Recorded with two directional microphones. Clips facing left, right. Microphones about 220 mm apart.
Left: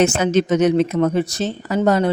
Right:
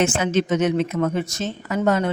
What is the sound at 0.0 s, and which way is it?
A man's voice, 40° left (ahead or behind).